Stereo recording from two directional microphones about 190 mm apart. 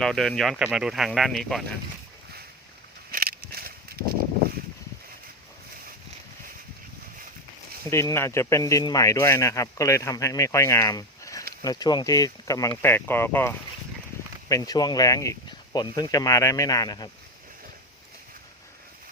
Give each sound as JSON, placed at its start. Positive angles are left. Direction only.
{"t": 0.0, "sound": "speech", "side_deg": 0}
{"t": 3.1, "sound": "a sound", "side_deg": -50}
{"t": 7.9, "sound": "speech", "side_deg": 15}